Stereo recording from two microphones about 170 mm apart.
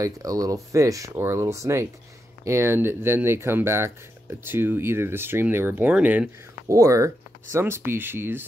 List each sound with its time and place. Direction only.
0.0 s speech: 20° right (ahead or behind)